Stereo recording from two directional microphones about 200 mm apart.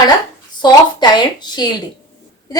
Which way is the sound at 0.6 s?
20° left (ahead or behind).